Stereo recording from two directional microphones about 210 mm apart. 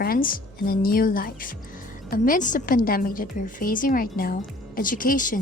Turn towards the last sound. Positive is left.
turn(degrees=40)  # may be behind; listen again after turning